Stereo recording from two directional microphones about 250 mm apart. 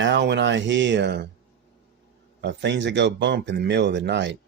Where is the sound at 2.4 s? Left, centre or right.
Right.